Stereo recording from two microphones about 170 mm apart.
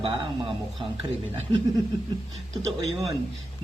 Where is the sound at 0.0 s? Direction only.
30° right (ahead or behind).